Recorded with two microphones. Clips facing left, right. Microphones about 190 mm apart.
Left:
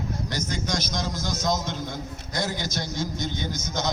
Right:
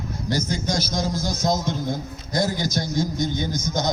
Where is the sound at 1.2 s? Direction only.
35° right (ahead or behind).